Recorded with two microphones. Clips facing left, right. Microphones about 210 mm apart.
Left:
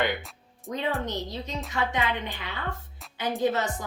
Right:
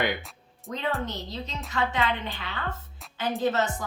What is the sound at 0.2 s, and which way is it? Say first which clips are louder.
Music: even; centre (ahead or behind).